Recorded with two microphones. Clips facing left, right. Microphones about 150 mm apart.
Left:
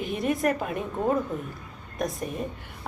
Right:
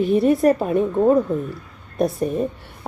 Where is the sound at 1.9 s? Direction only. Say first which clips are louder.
Right 10 dB; 30° right (ahead or behind).